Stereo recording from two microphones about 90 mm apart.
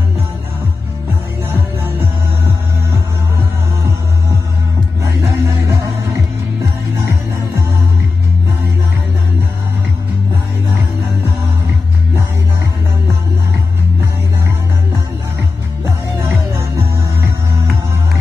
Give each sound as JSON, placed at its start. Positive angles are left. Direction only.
{"t": 1.5, "sound": "music", "side_deg": -25}
{"t": 5.0, "sound": "music", "side_deg": -35}
{"t": 7.0, "sound": "music", "side_deg": -35}
{"t": 16.2, "sound": "music", "side_deg": -30}